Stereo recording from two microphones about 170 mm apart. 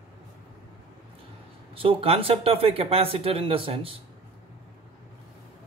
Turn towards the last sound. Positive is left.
turn(degrees=-35)  # may be behind; listen again after turning